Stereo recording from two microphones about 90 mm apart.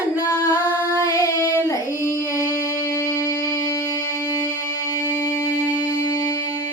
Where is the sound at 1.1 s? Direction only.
35° left (ahead or behind).